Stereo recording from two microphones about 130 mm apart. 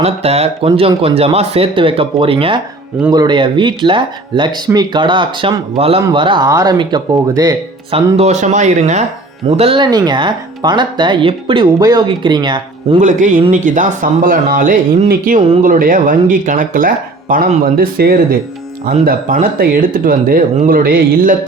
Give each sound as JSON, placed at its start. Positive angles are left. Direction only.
{"t": 0.0, "sound": "speech", "side_deg": -50}
{"t": 6.5, "sound": "speech", "side_deg": -25}
{"t": 7.9, "sound": "speech", "side_deg": -50}
{"t": 9.6, "sound": "speech", "side_deg": -45}
{"t": 9.8, "sound": "speech", "side_deg": -35}
{"t": 13.0, "sound": "speech", "side_deg": -80}
{"t": 19.0, "sound": "speech", "side_deg": -90}